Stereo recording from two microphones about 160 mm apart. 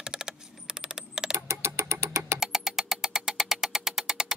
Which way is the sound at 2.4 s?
Centre (ahead or behind).